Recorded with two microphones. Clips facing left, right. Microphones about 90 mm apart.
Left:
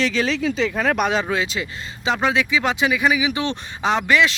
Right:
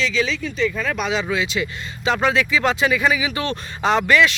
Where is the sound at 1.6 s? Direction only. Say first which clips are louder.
Right 2 dB; 20° left (ahead or behind).